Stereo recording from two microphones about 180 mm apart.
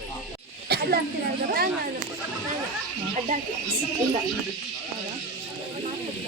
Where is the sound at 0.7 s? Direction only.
60° right (ahead or behind).